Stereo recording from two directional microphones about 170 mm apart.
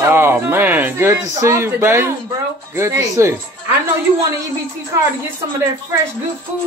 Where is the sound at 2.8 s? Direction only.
15° right (ahead or behind).